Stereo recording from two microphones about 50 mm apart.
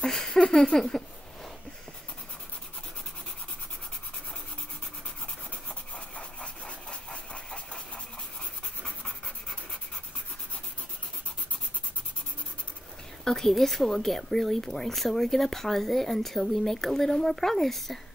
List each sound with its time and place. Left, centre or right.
0.0 s a sound: centre
5.9 s engine: left
13.2 s speech: centre